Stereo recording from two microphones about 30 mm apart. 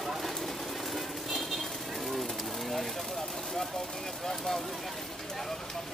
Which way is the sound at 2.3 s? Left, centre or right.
Centre.